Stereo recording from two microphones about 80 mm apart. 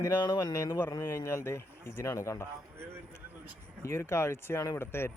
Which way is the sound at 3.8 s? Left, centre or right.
Left.